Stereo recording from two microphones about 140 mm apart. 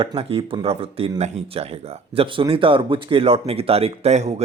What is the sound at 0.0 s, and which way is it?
Speech, 40° right (ahead or behind).